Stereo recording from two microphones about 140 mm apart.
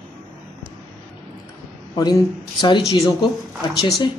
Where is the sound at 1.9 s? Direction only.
30° left (ahead or behind).